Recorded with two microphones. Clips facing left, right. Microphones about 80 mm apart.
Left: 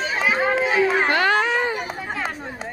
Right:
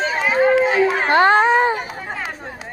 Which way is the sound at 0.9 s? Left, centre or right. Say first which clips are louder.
Right 4 dB; right.